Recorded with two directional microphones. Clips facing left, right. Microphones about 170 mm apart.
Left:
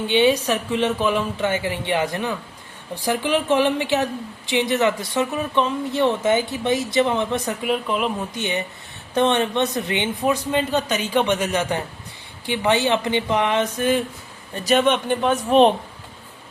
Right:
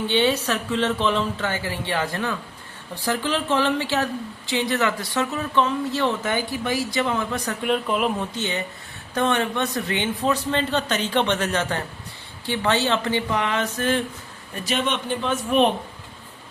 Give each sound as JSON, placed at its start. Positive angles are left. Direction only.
{"t": 0.1, "sound": "a woman's voice", "side_deg": 15}
{"t": 7.6, "sound": "speech", "side_deg": 0}
{"t": 8.4, "sound": "a woman's voice", "side_deg": 15}
{"t": 14.6, "sound": "speech", "side_deg": 45}
{"t": 15.4, "sound": "speech", "side_deg": 35}